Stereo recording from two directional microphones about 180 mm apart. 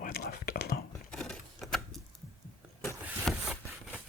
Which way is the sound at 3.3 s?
Centre (ahead or behind).